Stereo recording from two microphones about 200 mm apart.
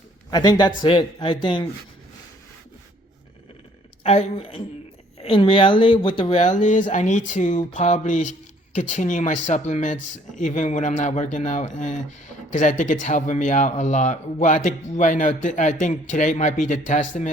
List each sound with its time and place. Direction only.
0.3 s speech: 20° left (ahead or behind)
4.0 s speech: 30° left (ahead or behind)